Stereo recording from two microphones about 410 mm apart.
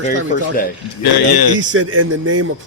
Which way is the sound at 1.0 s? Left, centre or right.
Left.